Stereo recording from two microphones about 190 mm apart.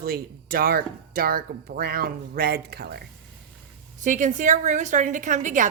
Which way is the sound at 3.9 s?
40° right (ahead or behind).